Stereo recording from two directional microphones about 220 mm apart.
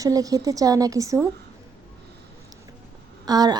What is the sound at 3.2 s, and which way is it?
Speech, 20° right (ahead or behind).